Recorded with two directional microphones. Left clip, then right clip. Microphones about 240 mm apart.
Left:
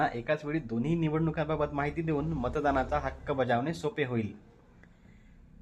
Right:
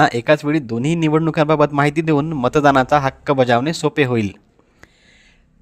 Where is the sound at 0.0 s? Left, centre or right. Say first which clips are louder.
Right 15 dB; right.